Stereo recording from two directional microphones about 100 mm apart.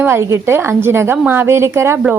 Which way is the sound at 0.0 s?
25° right (ahead or behind).